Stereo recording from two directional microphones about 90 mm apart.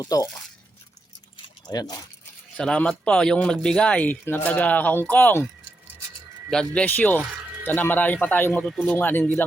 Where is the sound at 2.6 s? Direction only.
10° left (ahead or behind).